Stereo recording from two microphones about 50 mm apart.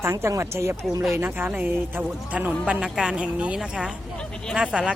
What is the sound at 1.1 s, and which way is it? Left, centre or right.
Speech, right.